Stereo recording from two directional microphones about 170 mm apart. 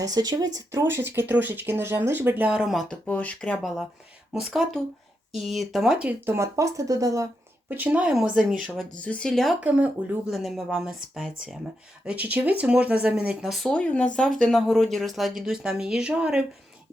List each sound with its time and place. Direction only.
0.0 s speech: 20° right (ahead or behind); by 16.4 s 5° right (ahead or behind)